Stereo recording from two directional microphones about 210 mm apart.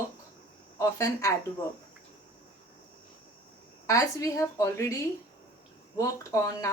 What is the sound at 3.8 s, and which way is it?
Speech, 15° left (ahead or behind).